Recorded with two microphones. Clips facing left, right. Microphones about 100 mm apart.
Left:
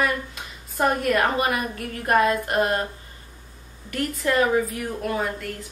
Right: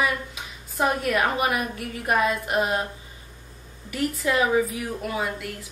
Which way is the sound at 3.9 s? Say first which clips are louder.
Left 1 dB; 5° right (ahead or behind).